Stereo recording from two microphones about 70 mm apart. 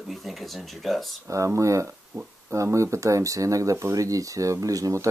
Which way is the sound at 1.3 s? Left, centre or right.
Right.